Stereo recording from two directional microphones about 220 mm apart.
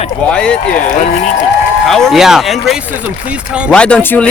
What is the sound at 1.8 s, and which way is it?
Speech, centre (ahead or behind).